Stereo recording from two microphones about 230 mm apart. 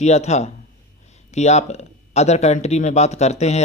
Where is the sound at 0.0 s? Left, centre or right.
Left.